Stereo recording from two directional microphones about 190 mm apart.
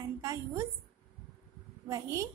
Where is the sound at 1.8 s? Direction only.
15° right (ahead or behind).